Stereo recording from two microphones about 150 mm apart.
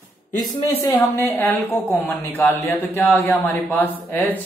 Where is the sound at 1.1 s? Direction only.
15° left (ahead or behind).